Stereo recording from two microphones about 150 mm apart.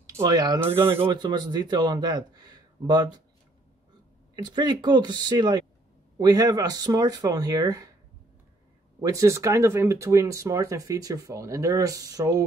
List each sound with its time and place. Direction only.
0.0 s speech: 25° right (ahead or behind)
0.6 s speech: 15° right (ahead or behind)
0.8 s speech: 35° right (ahead or behind)
4.4 s speech: 30° right (ahead or behind)
9.0 s speech: 20° right (ahead or behind)